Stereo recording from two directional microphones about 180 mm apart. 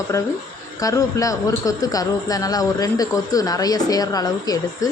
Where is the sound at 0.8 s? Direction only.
20° left (ahead or behind).